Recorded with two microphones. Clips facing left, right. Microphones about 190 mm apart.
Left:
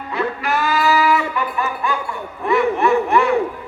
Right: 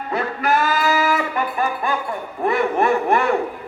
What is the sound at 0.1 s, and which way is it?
Music, 45° right (ahead or behind).